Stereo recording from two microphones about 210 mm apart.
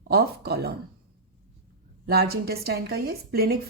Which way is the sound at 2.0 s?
45° right (ahead or behind).